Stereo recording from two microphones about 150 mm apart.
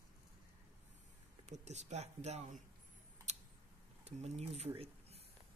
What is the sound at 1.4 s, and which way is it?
Speech, 50° right (ahead or behind).